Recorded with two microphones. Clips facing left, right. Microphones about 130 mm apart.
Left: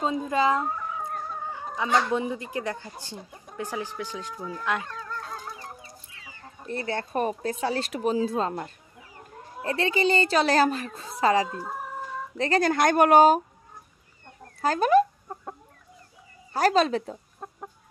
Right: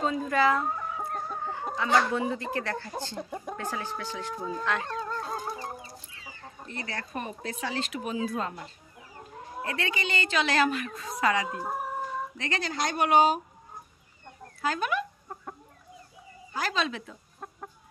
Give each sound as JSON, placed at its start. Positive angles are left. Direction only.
{"t": 0.0, "sound": "speech", "side_deg": 20}
{"t": 3.2, "sound": "speech", "side_deg": -90}
{"t": 4.0, "sound": "speech", "side_deg": 15}
{"t": 4.4, "sound": "speech", "side_deg": -25}
{"t": 4.8, "sound": "fowl", "side_deg": -30}
{"t": 6.7, "sound": "speech", "side_deg": 30}
{"t": 9.6, "sound": "speech", "side_deg": 30}
{"t": 11.4, "sound": "speech", "side_deg": -15}
{"t": 12.4, "sound": "speech", "side_deg": 35}
{"t": 12.6, "sound": "speech", "side_deg": 55}
{"t": 14.6, "sound": "speech", "side_deg": 40}
{"t": 16.5, "sound": "speech", "side_deg": 45}
{"t": 17.4, "sound": "chicken", "side_deg": 20}